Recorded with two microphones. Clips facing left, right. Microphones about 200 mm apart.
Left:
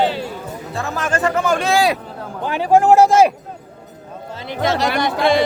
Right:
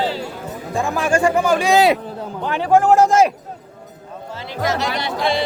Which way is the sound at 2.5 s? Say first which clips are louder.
Left 1 dB; 10° left (ahead or behind).